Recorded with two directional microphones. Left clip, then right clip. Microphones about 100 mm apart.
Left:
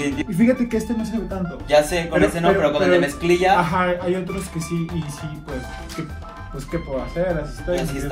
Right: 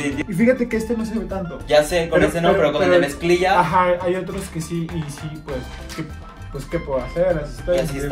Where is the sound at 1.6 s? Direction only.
15° left (ahead or behind).